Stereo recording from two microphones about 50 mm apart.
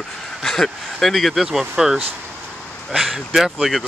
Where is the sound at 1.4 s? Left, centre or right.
Centre.